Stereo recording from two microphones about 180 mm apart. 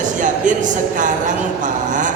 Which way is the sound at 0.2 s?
45° right (ahead or behind).